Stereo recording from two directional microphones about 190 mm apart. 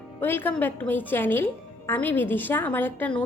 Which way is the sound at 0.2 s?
10° left (ahead or behind).